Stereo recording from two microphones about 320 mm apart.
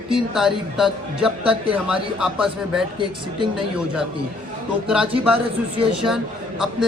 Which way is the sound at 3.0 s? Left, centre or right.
Centre.